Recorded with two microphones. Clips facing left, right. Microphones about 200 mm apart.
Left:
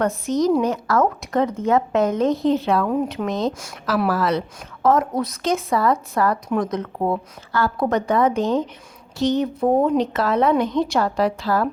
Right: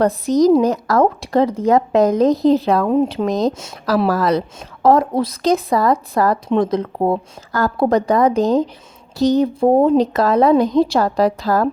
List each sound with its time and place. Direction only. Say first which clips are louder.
0.0 s a woman's voice: right 6 dB; 35° right (ahead or behind)
2.9 s speech: right 6 dB; 25° right (ahead or behind)
3.2 s a woman's voice: right 5 dB; 40° right (ahead or behind)